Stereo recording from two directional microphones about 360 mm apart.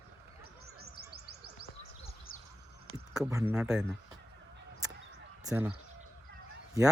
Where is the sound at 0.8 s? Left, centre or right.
Right.